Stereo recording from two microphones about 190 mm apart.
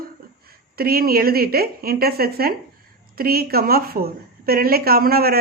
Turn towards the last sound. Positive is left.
turn(degrees=-50)  # may be behind; listen again after turning